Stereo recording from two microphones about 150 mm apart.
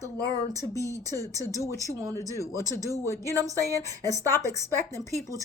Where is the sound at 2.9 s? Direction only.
20° left (ahead or behind).